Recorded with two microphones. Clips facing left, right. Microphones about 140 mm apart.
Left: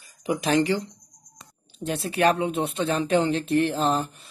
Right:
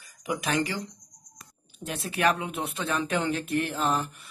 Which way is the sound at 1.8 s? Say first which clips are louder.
Left 5 dB; 30° left (ahead or behind).